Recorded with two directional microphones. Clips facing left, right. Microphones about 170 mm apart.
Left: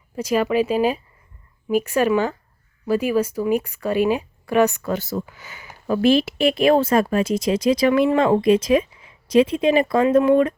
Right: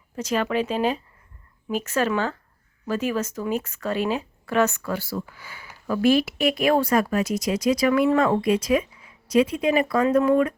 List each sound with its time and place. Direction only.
0.2 s speech: 10° left (ahead or behind); by 10.5 s 25° left (ahead or behind)